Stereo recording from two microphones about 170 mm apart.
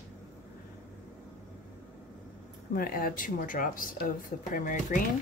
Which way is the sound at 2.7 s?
60° left (ahead or behind).